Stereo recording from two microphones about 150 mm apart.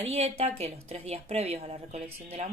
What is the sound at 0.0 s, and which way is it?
A woman's voice, 45° right (ahead or behind).